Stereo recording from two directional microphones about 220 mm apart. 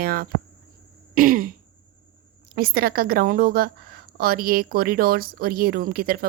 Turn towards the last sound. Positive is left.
turn(degrees=-40)  # may be behind; listen again after turning